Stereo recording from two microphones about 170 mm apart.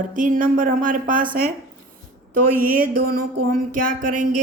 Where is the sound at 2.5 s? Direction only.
60° right (ahead or behind).